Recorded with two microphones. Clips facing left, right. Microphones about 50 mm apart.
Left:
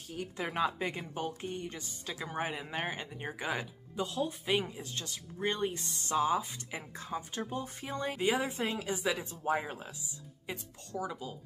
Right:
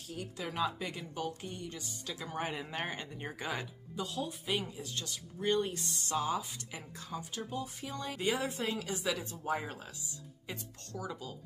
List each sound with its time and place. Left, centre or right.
0.1 s speech: left
2.1 s speech: centre
3.9 s speech: left
8.2 s speech: left
9.4 s speech: centre